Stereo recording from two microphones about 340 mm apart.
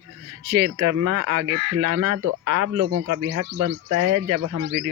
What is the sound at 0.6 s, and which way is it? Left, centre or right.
Speech, right.